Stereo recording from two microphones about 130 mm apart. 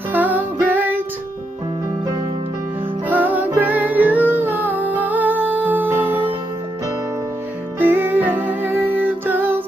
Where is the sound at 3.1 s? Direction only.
15° right (ahead or behind).